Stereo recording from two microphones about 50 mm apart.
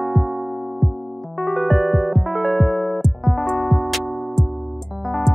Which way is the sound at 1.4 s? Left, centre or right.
Centre.